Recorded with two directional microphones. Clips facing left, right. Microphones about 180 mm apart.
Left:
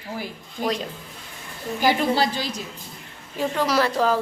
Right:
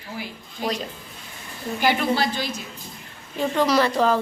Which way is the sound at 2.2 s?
35° left (ahead or behind).